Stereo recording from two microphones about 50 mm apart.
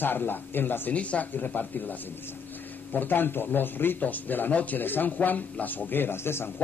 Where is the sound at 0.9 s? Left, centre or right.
Left.